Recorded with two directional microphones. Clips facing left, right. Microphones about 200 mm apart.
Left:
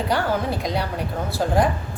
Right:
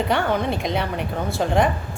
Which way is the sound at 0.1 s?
5° left (ahead or behind).